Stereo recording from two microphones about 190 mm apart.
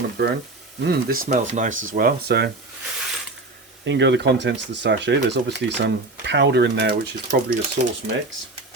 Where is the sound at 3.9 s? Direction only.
70° right (ahead or behind).